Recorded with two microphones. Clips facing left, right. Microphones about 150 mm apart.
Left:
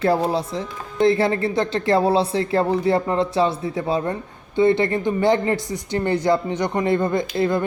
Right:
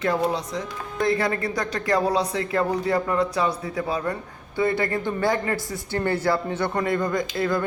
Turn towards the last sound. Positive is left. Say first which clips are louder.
# left 4 dB
turn(degrees=25)  # may be behind; listen again after turning